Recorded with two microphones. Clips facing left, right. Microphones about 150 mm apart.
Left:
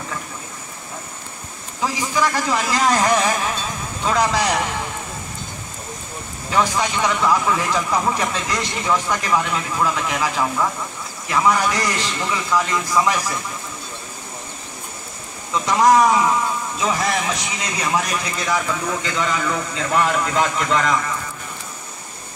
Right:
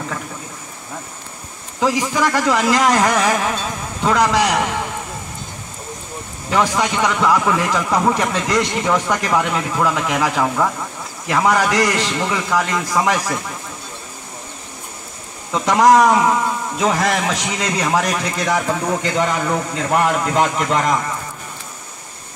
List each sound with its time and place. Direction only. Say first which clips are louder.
1.8 s speech: right 4 dB; 75° right (ahead or behind)
6.5 s a man's voice: right 2 dB; 65° right (ahead or behind)
15.5 s a man's voice: right 3 dB; 70° right (ahead or behind); by 20.9 s 45° right (ahead or behind)